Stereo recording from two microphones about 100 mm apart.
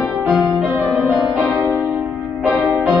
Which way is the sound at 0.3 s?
Centre (ahead or behind).